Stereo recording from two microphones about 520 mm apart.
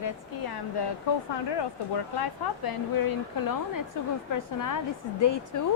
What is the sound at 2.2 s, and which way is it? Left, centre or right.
A woman's voice, left.